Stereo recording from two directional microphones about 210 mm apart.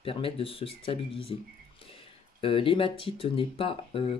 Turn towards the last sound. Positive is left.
turn(degrees=25)  # may be behind; listen again after turning